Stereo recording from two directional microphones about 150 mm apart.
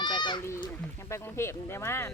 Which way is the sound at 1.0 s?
20° left (ahead or behind).